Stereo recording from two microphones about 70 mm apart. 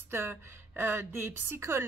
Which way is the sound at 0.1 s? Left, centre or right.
Right.